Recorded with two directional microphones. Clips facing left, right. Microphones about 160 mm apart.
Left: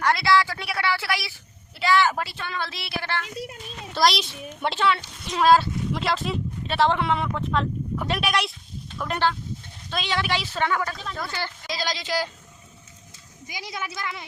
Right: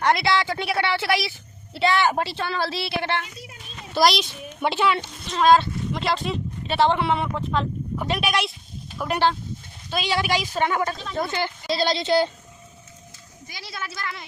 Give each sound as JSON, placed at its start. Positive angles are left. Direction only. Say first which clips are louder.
{"t": 0.0, "sound": "a woman's voice", "louder": "even", "side_deg": -20}
{"t": 3.9, "sound": "a child's voice", "louder": "right 2 dB", "side_deg": 0}
{"t": 5.3, "sound": "a woman's voice", "louder": "right 1 dB", "side_deg": 5}
{"t": 11.7, "sound": "a woman's voice", "louder": "right 8 dB", "side_deg": -30}
{"t": 13.5, "sound": "a woman's voice", "louder": "left 2 dB", "side_deg": 15}